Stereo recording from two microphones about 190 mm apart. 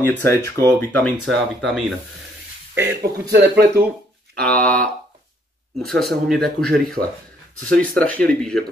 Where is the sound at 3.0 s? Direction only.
55° right (ahead or behind).